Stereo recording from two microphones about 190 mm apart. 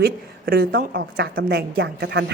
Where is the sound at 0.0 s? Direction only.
55° right (ahead or behind).